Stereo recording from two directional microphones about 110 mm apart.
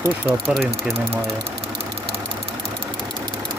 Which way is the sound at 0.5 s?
Centre (ahead or behind).